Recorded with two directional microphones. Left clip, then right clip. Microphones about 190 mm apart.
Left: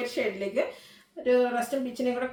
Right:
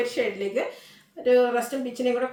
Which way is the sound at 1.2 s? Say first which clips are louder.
Right 4 dB; 15° right (ahead or behind).